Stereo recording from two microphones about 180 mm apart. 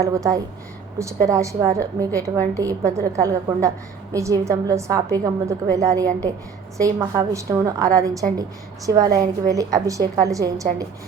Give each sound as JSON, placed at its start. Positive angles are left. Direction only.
{"t": 0.0, "sound": "a woman's voice", "side_deg": -20}